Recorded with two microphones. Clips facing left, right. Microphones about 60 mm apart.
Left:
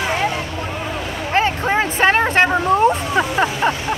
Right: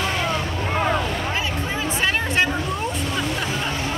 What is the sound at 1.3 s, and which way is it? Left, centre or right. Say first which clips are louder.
Hubbub: left 8 dB; left.